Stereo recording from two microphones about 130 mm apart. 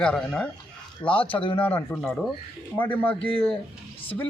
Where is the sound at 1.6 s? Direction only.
15° left (ahead or behind).